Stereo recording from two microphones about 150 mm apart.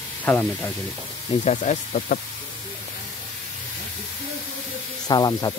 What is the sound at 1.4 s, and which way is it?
Speech, 50° left (ahead or behind).